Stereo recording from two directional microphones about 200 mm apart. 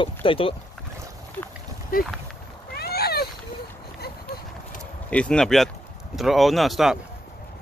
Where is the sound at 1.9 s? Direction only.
45° left (ahead or behind).